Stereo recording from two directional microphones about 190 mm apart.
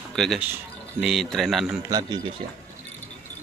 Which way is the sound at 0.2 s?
Centre (ahead or behind).